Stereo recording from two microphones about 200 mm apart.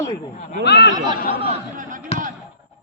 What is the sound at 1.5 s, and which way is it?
Speech, 40° right (ahead or behind).